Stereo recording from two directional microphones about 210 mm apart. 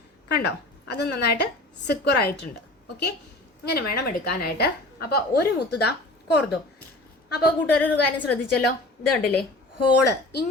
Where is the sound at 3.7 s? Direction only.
50° left (ahead or behind).